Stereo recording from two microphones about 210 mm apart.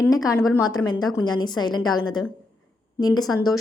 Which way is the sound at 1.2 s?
20° left (ahead or behind).